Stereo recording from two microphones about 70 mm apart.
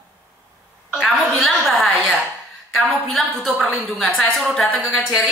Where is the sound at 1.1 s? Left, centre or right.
Centre.